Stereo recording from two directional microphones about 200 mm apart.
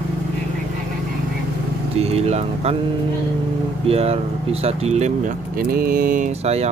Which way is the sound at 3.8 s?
30° right (ahead or behind).